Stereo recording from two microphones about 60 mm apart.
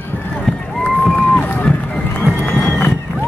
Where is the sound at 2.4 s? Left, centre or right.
Left.